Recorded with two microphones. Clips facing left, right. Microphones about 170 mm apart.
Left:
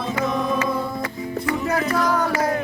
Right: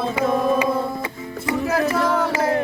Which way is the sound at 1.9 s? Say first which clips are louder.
Right 1 dB; 25° right (ahead or behind).